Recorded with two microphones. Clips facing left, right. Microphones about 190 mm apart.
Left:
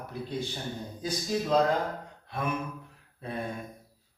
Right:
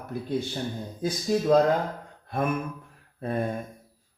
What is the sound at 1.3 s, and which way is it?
Speech, 50° right (ahead or behind).